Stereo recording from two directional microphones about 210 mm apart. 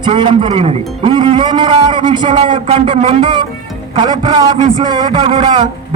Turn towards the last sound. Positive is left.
turn(degrees=-25)  # may be behind; listen again after turning